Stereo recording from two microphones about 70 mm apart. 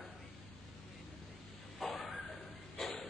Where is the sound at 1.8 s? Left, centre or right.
Centre.